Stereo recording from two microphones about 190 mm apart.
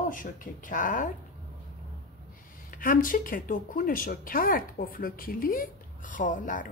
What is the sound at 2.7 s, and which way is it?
Speech, 45° left (ahead or behind).